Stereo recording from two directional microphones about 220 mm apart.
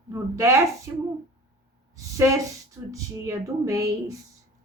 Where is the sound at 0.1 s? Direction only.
15° right (ahead or behind).